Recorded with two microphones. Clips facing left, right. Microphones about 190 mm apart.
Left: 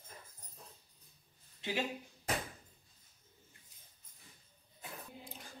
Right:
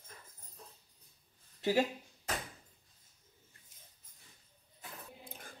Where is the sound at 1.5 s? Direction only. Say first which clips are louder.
Right 8 dB; 45° right (ahead or behind).